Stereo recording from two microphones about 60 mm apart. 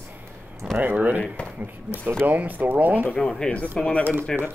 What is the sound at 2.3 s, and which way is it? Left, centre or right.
Speech, right.